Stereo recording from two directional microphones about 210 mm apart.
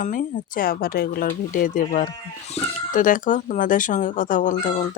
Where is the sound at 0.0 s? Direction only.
40° left (ahead or behind).